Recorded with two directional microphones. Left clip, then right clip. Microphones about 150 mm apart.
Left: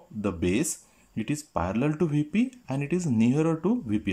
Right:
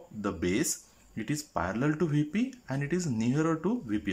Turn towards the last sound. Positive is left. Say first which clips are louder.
# left 4 dB
turn(degrees=20)  # may be behind; listen again after turning